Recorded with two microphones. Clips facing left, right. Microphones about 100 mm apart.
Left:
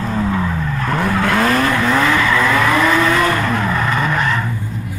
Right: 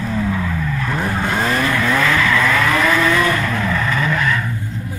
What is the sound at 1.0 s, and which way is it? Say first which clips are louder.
Vehicle: left 5 dB; 75° left (ahead or behind).